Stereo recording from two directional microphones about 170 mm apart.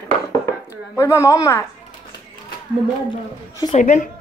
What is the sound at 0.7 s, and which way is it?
Speech, 15° left (ahead or behind).